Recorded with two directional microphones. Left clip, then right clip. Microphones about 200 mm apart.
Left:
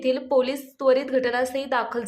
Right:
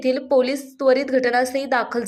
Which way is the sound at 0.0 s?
15° right (ahead or behind).